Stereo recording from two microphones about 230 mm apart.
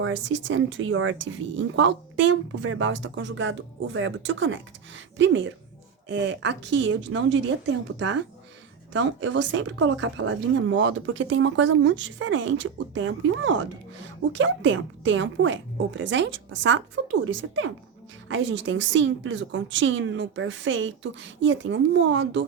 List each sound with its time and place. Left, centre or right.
0.0 s speech: right
18.3 s speech: right